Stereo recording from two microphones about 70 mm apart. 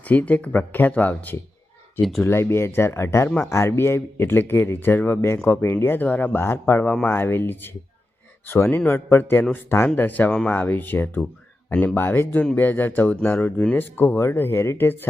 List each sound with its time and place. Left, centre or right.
0.0 s speech: left
2.0 s speech: centre
2.2 s speech: left
11.9 s speech: left